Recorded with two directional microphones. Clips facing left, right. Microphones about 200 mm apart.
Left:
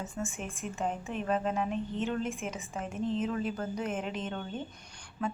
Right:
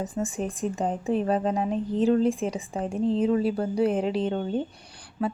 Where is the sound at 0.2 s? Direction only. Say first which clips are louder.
Right 10 dB; 35° right (ahead or behind).